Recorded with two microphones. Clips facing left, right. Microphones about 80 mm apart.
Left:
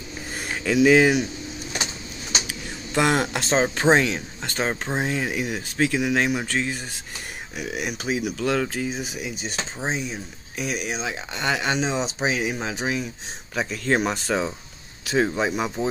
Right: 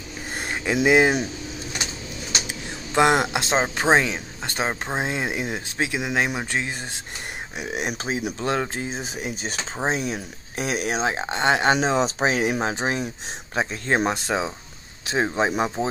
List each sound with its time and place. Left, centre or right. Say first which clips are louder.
0.7 s speech: left 3 dB; centre
2.4 s speech: right 1 dB; right
7.5 s speech: right 1 dB; right
9.2 s speech: right 1 dB; right
11.7 s speech: right 4 dB; right
13.6 s speech: even; right
14.1 s speech: even; centre